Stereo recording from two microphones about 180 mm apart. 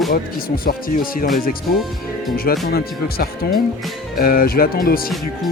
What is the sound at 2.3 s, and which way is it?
Speech, 55° left (ahead or behind).